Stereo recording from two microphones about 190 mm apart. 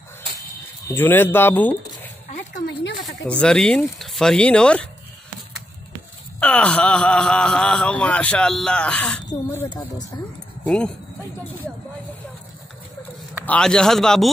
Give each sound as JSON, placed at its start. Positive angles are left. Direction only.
{"t": 0.8, "sound": "speech", "side_deg": 10}
{"t": 2.3, "sound": "a sound", "side_deg": 60}
{"t": 3.3, "sound": "speech", "side_deg": 5}
{"t": 6.4, "sound": "speech", "side_deg": 5}
{"t": 9.3, "sound": "speech", "side_deg": 20}
{"t": 10.6, "sound": "speech", "side_deg": 5}
{"t": 13.5, "sound": "speech", "side_deg": 5}